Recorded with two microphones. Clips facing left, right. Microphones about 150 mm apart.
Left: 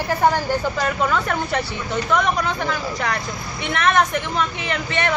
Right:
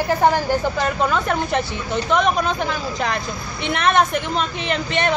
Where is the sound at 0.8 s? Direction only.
20° right (ahead or behind).